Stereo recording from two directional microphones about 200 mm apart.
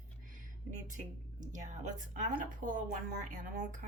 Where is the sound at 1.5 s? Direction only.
40° right (ahead or behind).